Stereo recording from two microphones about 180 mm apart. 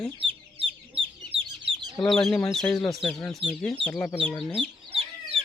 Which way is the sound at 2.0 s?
Centre (ahead or behind).